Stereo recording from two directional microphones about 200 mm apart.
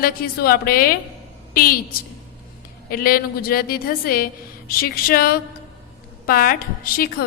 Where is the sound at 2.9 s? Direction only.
45° left (ahead or behind).